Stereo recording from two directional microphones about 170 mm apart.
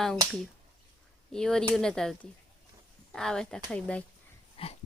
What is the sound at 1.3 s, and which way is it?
Speech, 5° left (ahead or behind).